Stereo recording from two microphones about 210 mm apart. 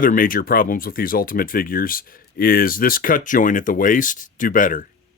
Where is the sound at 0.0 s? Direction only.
40° left (ahead or behind).